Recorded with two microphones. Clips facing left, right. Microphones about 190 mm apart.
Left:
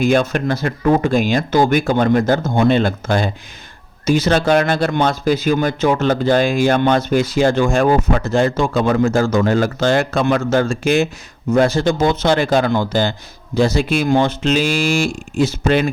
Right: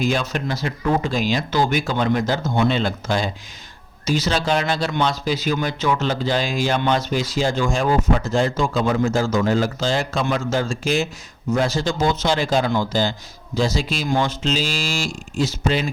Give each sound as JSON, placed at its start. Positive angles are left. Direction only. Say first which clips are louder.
{"t": 0.0, "sound": "speech", "louder": "left 7 dB", "side_deg": 55}